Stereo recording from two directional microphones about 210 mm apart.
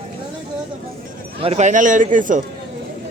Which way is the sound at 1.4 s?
30° right (ahead or behind).